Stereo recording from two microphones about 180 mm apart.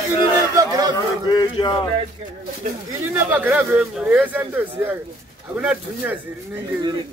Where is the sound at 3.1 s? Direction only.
10° right (ahead or behind).